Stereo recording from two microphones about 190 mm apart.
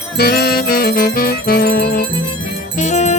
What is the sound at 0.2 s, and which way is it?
Music, 55° left (ahead or behind).